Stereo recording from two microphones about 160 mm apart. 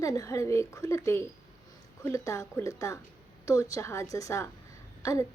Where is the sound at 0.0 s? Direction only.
20° left (ahead or behind).